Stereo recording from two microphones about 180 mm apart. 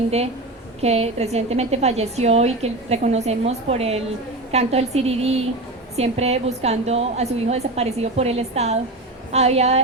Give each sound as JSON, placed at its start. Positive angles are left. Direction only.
{"t": 0.8, "sound": "a woman's voice", "side_deg": -35}